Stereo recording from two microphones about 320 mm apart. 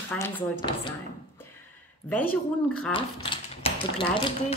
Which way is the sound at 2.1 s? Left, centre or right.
Centre.